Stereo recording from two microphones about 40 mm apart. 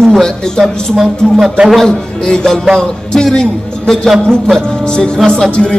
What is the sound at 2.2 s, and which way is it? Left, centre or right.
A man's voice, centre.